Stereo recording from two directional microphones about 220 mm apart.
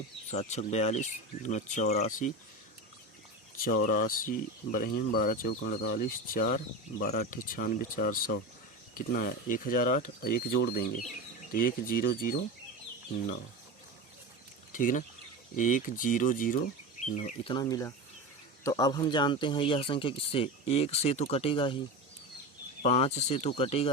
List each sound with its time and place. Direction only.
0.3 s speech: 30° left (ahead or behind)
3.6 s speech: 40° left (ahead or behind)
14.7 s speech: 35° left (ahead or behind)
17.5 s speech: 15° left (ahead or behind)
22.8 s speech: 30° left (ahead or behind)